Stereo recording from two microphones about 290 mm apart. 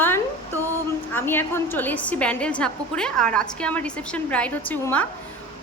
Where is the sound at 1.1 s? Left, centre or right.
Centre.